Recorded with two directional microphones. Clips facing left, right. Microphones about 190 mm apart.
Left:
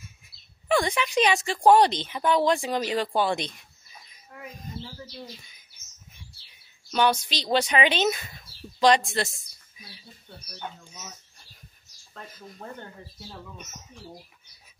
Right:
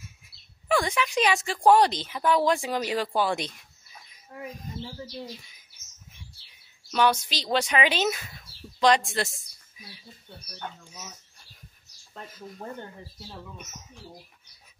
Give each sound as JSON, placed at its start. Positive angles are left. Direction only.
{"t": 0.7, "sound": "speech", "side_deg": -5}
{"t": 4.3, "sound": "speech", "side_deg": -25}
{"t": 6.9, "sound": "speech", "side_deg": 0}
{"t": 10.9, "sound": "speech", "side_deg": -5}